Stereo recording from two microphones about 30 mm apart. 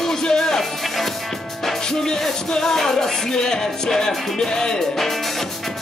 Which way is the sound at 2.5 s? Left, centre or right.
Left.